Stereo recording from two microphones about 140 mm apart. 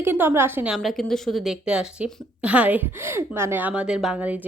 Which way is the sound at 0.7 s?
Centre (ahead or behind).